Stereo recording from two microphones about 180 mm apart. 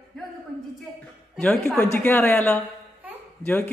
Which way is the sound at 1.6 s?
10° left (ahead or behind).